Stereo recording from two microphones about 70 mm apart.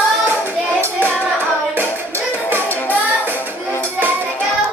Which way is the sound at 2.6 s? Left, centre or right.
Left.